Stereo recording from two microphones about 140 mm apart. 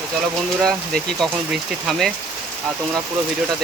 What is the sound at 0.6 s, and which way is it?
Speech, 5° left (ahead or behind).